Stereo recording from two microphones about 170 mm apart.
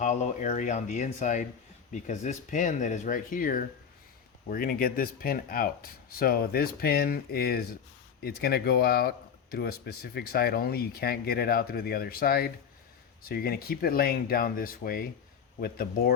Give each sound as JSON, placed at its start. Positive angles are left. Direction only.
{"t": 0.0, "sound": "speech", "side_deg": 45}